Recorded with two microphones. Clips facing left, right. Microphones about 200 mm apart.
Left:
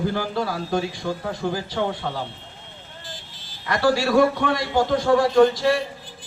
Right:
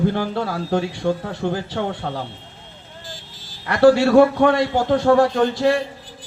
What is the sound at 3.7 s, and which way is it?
Speech, 65° right (ahead or behind).